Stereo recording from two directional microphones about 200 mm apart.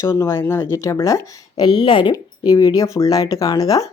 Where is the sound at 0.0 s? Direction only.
15° left (ahead or behind).